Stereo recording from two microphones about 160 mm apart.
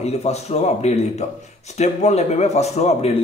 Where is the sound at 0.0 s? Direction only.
40° left (ahead or behind).